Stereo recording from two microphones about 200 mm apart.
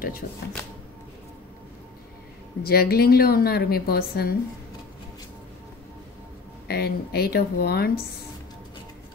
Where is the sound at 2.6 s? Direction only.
50° left (ahead or behind).